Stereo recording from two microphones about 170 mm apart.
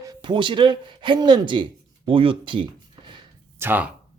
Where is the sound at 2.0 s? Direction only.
30° right (ahead or behind).